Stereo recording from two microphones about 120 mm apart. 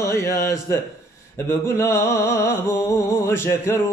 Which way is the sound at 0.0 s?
25° left (ahead or behind).